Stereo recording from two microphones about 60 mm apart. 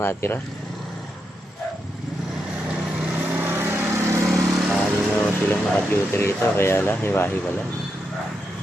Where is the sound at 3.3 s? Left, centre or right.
Right.